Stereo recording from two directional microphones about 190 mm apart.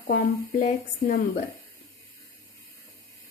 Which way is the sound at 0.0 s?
40° left (ahead or behind).